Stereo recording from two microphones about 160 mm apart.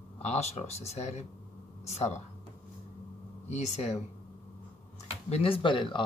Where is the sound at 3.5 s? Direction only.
45° left (ahead or behind).